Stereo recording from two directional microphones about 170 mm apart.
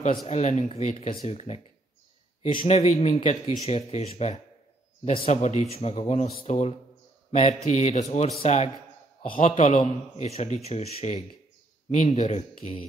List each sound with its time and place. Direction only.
0.3 s speech: 40° left (ahead or behind)